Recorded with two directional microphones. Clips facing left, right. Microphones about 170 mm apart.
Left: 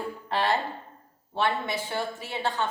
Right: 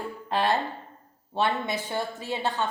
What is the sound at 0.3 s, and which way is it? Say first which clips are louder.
A woman's voice: right 1 dB; 15° right (ahead or behind).